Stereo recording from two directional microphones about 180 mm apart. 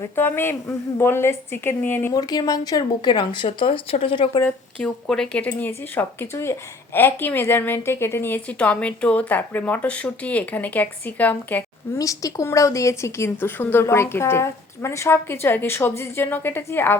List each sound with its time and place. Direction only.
0.2 s a woman's voice: 10° left (ahead or behind); by 4.3 s 30° left (ahead or behind)
4.4 s speech: 10° left (ahead or behind)